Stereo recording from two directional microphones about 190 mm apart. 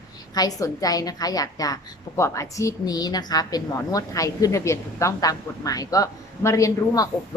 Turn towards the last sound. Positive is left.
turn(degrees=20)  # may be behind; listen again after turning